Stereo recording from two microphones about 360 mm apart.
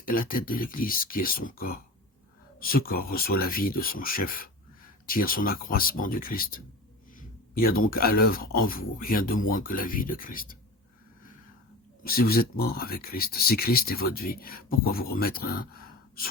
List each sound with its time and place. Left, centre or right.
0.0 s speech: left
12.0 s speech: left